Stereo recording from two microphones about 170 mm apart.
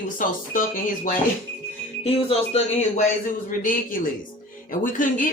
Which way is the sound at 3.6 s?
55° left (ahead or behind).